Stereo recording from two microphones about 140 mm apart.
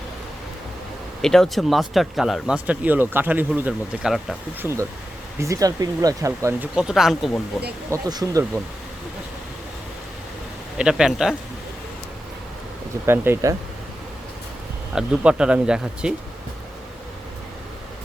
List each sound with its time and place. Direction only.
1.2 s speech: 5° left (ahead or behind)
4.6 s speech: 20° right (ahead or behind)
6.7 s speech: 5° right (ahead or behind)
7.9 s speech: 25° right (ahead or behind)
10.8 s speech: 5° right (ahead or behind)
13.1 s speech: 15° right (ahead or behind)
14.9 s speech: 5° right (ahead or behind)